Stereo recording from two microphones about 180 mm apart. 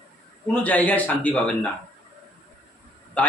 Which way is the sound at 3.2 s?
10° left (ahead or behind).